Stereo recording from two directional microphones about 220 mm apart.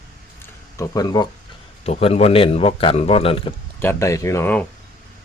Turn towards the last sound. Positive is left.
turn(degrees=10)  # may be behind; listen again after turning